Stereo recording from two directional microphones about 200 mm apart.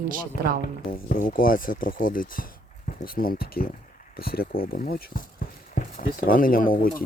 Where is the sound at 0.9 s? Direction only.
45° left (ahead or behind).